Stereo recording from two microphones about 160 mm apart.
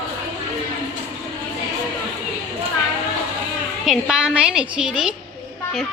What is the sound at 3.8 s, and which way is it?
A woman's voice, 5° right (ahead or behind).